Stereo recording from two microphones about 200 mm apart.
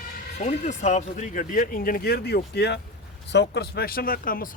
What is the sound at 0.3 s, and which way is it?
Speech, 35° left (ahead or behind).